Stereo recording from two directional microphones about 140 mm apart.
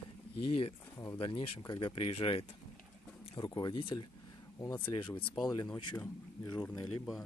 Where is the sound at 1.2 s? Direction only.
35° left (ahead or behind).